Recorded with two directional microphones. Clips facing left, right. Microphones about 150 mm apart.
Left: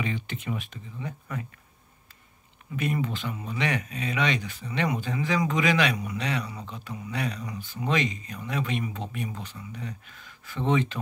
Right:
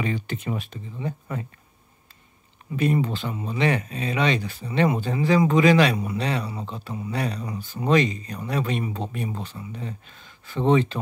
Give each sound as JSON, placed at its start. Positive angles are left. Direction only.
{"t": 0.0, "sound": "speech", "side_deg": -40}
{"t": 2.7, "sound": "speech", "side_deg": -30}